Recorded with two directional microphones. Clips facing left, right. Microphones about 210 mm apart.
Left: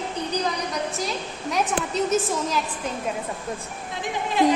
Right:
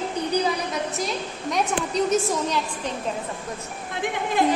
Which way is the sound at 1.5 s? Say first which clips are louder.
Right 1 dB; centre (ahead or behind).